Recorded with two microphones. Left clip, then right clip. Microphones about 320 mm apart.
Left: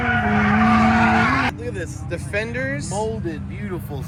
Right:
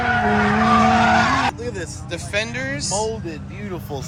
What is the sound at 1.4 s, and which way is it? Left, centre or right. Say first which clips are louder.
Vehicle: right 1 dB; right.